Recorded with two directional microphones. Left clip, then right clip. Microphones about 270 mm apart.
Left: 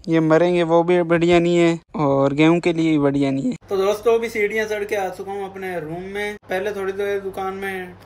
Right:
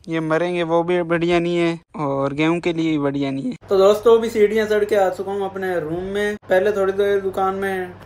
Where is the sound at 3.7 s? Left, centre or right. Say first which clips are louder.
Right 5 dB; centre.